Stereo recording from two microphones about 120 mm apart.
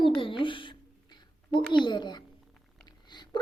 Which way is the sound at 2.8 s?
35° left (ahead or behind).